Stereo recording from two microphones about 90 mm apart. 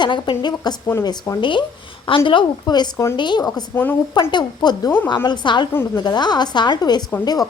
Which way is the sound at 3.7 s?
20° left (ahead or behind).